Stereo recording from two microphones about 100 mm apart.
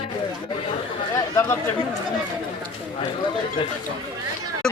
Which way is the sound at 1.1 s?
30° left (ahead or behind).